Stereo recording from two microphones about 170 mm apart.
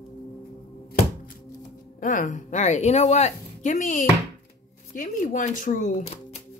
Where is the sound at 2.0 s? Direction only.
50° left (ahead or behind).